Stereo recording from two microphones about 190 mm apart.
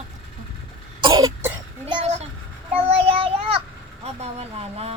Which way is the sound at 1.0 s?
25° right (ahead or behind).